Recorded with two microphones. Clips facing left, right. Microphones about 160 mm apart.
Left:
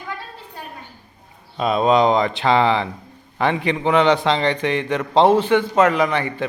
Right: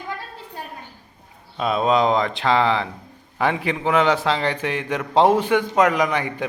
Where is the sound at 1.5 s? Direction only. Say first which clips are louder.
Left 3 dB; centre (ahead or behind).